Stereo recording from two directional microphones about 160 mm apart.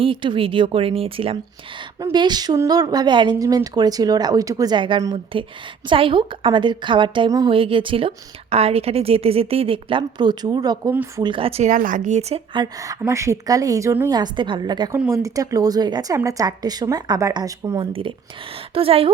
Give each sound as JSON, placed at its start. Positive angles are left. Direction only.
{"t": 0.0, "sound": "a woman's voice", "side_deg": -30}
{"t": 2.0, "sound": "a woman's voice", "side_deg": -25}
{"t": 11.7, "sound": "speech", "side_deg": -55}
{"t": 12.5, "sound": "speech", "side_deg": -20}
{"t": 14.1, "sound": "speech", "side_deg": -30}
{"t": 14.9, "sound": "speech", "side_deg": -15}
{"t": 18.7, "sound": "a woman's voice", "side_deg": -35}